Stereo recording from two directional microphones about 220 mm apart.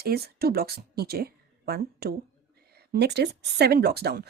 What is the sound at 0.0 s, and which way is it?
Speech, 45° right (ahead or behind).